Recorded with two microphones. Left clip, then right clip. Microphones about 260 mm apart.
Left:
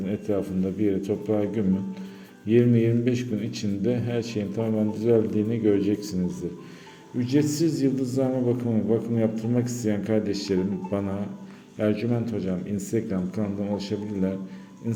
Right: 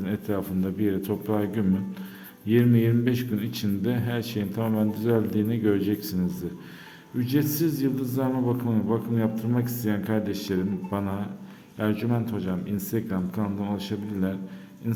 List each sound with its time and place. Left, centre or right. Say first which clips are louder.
0.0 s a man's voice: left 3 dB; centre
7.2 s a man's voice: left 2 dB; centre